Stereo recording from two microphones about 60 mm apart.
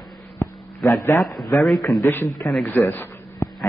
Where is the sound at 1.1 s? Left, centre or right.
Left.